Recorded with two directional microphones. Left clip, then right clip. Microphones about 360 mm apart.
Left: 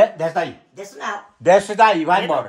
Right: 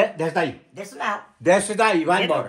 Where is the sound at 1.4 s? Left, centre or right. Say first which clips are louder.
Left 5 dB; left.